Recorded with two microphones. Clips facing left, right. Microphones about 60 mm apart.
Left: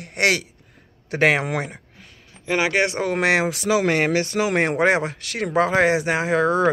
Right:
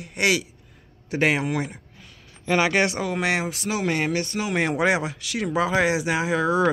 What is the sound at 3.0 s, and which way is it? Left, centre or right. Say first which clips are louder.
Speech: left 5 dB; left.